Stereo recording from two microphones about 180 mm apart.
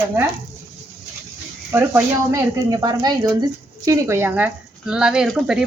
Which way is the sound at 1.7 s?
15° right (ahead or behind).